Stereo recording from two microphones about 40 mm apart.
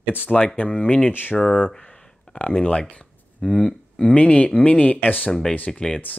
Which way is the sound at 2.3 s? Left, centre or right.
Left.